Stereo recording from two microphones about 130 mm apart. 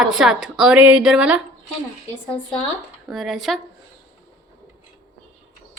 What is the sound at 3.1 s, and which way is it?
Speech, centre (ahead or behind).